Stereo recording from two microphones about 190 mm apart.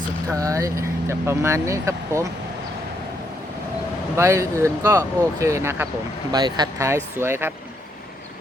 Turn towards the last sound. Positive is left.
turn(degrees=-10)  # may be behind; listen again after turning